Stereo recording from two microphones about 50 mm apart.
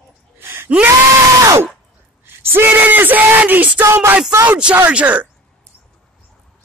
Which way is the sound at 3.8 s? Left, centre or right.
Right.